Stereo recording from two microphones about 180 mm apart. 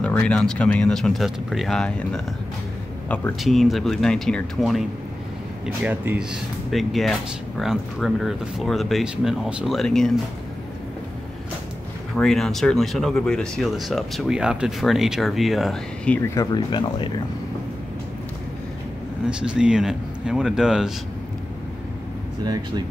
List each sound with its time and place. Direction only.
0.0 s speech: 5° left (ahead or behind)
3.4 s speech: centre (ahead or behind)
5.9 s speech: 10° right (ahead or behind)
12.2 s speech: centre (ahead or behind)
16.2 s speech: 20° left (ahead or behind)
19.2 s speech: 5° right (ahead or behind)
22.4 s speech: 20° right (ahead or behind)